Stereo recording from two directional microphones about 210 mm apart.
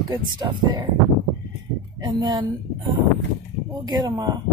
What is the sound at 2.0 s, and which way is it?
Speech, 20° right (ahead or behind).